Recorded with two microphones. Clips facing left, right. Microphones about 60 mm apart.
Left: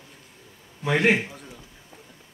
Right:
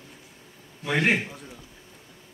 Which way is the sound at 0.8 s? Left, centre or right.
Left.